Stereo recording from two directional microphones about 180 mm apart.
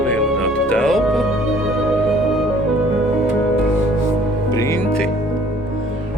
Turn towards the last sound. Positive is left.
turn(degrees=15)  # may be behind; listen again after turning